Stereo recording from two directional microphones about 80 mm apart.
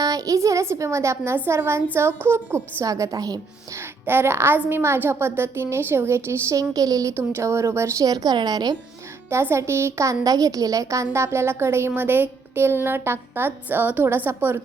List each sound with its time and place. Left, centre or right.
0.0 s a woman's voice: right
2.8 s a woman's voice: right
4.0 s a woman's voice: right
6.6 s a woman's voice: right
7.1 s a woman's voice: right
8.0 s a woman's voice: right
9.3 s a woman's voice: right